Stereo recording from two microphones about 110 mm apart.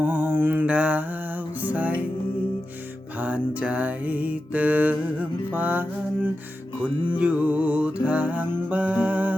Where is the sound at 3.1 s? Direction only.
15° right (ahead or behind).